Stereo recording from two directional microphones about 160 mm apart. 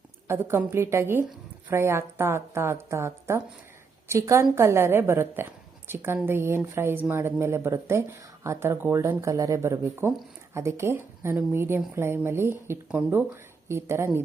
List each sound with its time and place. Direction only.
0.3 s speech: 15° right (ahead or behind)